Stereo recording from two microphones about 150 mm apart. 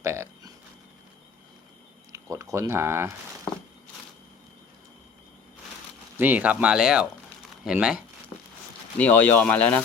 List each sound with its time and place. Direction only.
0.0 s a sound: 20° right (ahead or behind)
2.1 s speech: 20° right (ahead or behind)
6.1 s speech: 10° right (ahead or behind)
9.0 s speech: 10° left (ahead or behind)